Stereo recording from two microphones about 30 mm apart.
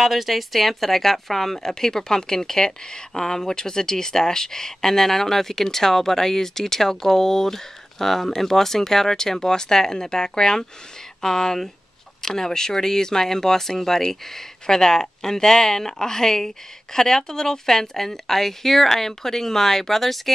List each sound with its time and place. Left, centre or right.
0.0 s speech: centre